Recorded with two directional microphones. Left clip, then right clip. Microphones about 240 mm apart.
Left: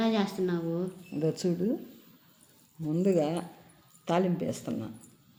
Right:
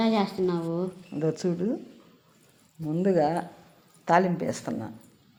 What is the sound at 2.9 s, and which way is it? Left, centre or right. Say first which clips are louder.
Speech: right 3 dB; centre.